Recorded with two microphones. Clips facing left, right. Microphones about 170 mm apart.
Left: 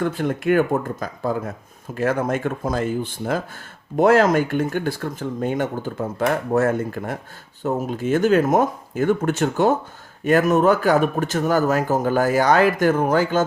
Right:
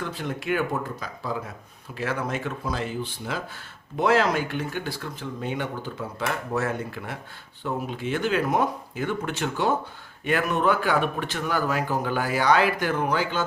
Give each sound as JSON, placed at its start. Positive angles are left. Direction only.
{"t": 0.0, "sound": "speech", "side_deg": 50}